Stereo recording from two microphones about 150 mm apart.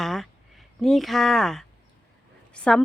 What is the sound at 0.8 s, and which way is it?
Speech, centre (ahead or behind).